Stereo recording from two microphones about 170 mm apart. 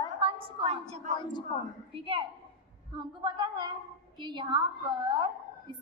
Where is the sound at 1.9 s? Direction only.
30° right (ahead or behind).